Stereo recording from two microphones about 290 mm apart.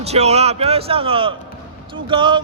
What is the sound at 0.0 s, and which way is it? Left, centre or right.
A man's voice, right.